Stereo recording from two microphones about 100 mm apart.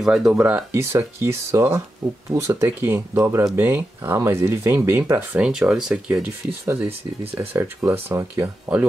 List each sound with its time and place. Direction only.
0.0 s speech: 5° right (ahead or behind)
0.7 s speech: 25° right (ahead or behind)
5.4 s speech: 5° right (ahead or behind)
7.3 s speech: 25° right (ahead or behind)
8.4 s speech: 15° right (ahead or behind)